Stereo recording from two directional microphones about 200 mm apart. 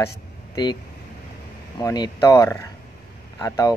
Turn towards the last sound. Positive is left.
turn(degrees=15)  # may be behind; listen again after turning